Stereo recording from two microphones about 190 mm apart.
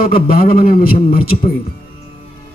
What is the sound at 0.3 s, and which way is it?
Speech, 50° left (ahead or behind).